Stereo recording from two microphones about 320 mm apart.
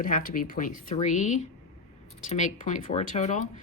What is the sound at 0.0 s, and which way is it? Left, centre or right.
Speech, left.